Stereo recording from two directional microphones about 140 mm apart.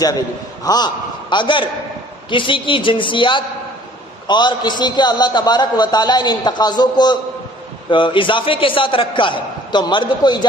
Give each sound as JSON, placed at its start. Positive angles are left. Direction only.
{"t": 0.6, "sound": "a man's voice", "side_deg": 30}